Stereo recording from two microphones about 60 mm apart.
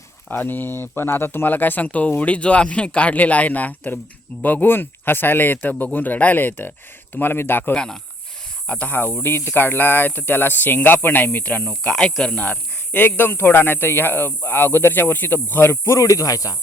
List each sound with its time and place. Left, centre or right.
0.3 s speech: left
7.7 s speech: centre
11.9 s speech: centre; by 16.6 s left